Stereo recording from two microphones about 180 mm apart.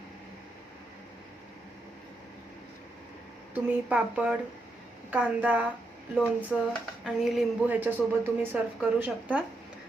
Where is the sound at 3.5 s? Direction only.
5° right (ahead or behind).